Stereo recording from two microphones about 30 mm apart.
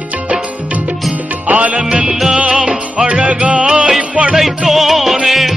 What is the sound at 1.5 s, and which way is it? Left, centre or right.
Music, right.